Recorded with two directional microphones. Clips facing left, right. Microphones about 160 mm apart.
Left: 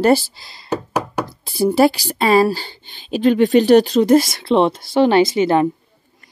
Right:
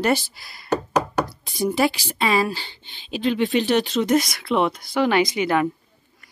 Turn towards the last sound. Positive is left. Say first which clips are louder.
# left 6 dB
turn(degrees=30)  # may be behind; listen again after turning